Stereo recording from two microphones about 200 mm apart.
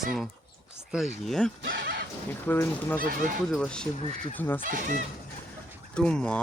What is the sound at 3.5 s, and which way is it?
Speech, 5° left (ahead or behind).